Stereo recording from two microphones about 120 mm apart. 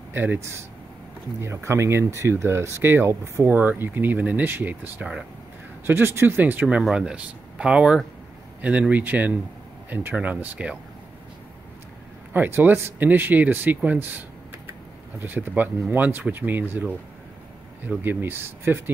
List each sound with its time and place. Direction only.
0.1 s speech: 15° right (ahead or behind)
12.3 s speech: 20° right (ahead or behind)